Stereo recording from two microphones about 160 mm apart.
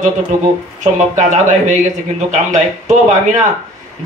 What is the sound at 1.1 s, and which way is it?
Speech, 50° right (ahead or behind).